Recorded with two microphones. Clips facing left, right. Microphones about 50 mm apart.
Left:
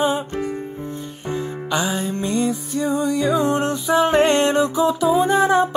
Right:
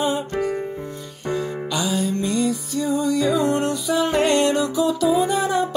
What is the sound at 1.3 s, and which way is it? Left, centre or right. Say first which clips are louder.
Music: left 1 dB; left.